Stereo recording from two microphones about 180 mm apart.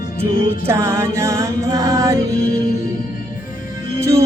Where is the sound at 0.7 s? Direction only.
15° right (ahead or behind).